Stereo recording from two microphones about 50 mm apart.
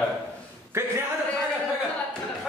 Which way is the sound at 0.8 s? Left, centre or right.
Right.